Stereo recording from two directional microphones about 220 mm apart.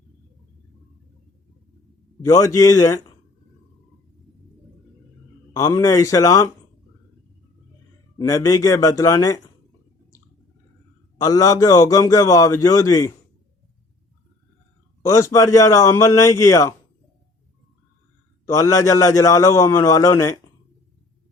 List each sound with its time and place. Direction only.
2.2 s a man's voice: 15° left (ahead or behind)
5.5 s a man's voice: 15° left (ahead or behind)
8.2 s a man's voice: 15° left (ahead or behind)
11.2 s a man's voice: 15° left (ahead or behind)
15.0 s a man's voice: 15° left (ahead or behind)
18.4 s a man's voice: 15° left (ahead or behind)